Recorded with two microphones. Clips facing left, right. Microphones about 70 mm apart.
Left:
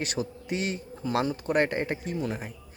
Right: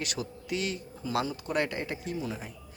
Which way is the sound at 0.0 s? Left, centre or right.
Left.